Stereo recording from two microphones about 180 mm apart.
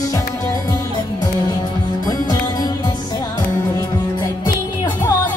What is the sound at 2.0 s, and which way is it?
Music, 20° left (ahead or behind).